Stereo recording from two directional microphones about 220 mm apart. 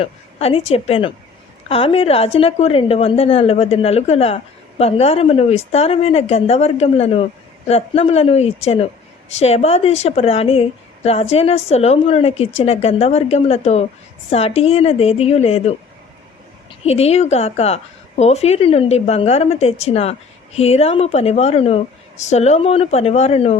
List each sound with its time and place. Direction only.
0.0 s a woman's voice: 25° left (ahead or behind)
16.8 s a woman's voice: 30° left (ahead or behind)